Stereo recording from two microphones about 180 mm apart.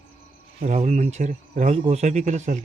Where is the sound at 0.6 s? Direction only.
45° right (ahead or behind).